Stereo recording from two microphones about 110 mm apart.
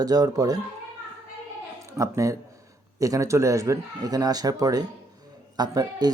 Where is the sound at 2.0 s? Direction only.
30° right (ahead or behind).